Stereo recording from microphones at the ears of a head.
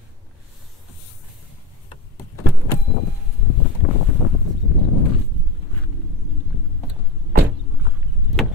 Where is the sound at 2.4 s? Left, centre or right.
Left.